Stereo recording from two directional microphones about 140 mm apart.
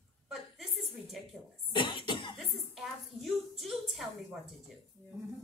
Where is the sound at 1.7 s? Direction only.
35° left (ahead or behind).